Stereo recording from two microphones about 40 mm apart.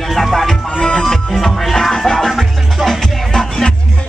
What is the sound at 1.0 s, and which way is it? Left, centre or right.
Music, centre.